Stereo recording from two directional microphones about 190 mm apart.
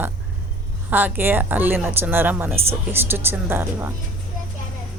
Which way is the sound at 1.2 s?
10° right (ahead or behind).